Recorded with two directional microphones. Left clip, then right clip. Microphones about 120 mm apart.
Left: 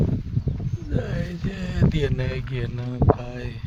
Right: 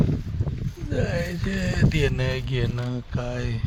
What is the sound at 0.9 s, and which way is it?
Speech, centre (ahead or behind).